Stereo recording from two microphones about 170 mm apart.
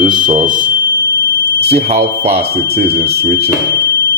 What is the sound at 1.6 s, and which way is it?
Speech, 35° right (ahead or behind).